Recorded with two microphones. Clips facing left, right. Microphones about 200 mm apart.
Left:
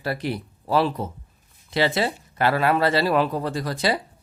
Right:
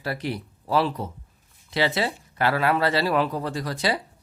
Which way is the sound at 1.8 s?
30° left (ahead or behind).